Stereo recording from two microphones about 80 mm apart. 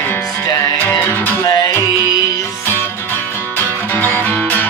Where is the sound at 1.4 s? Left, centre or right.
Left.